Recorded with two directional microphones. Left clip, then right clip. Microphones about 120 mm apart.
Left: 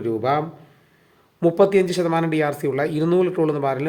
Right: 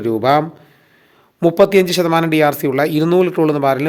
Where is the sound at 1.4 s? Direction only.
45° right (ahead or behind).